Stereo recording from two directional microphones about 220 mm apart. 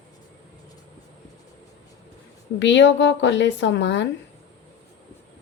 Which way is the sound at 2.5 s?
55° left (ahead or behind).